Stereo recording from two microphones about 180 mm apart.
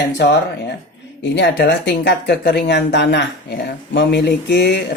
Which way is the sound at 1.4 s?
70° left (ahead or behind).